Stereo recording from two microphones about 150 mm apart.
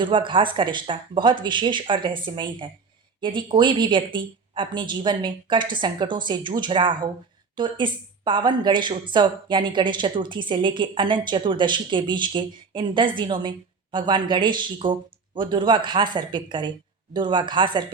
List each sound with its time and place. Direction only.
0.0 s speech: 35° right (ahead or behind)